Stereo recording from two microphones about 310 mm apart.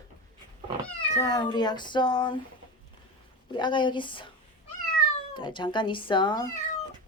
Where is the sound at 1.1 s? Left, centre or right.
Centre.